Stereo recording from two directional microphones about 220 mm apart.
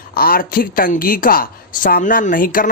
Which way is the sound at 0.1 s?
40° left (ahead or behind).